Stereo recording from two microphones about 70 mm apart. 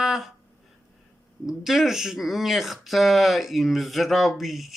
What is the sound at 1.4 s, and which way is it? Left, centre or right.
Speech, centre.